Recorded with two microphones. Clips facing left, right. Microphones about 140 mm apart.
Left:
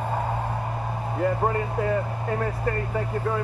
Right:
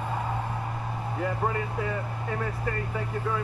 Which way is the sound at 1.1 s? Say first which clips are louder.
Left 5 dB; 45° left (ahead or behind).